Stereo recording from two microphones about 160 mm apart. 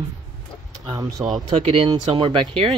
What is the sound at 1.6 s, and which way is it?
Speech, 35° right (ahead or behind).